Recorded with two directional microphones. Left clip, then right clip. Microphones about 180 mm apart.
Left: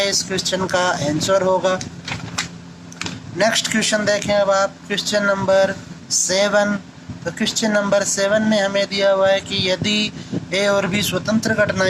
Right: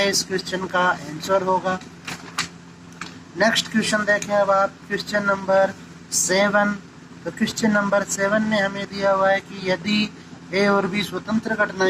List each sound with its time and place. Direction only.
0.0 s speech: 35° left (ahead or behind)
3.0 s speech: 40° left (ahead or behind)